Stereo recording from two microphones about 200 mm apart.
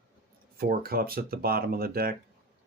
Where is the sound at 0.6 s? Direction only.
45° right (ahead or behind).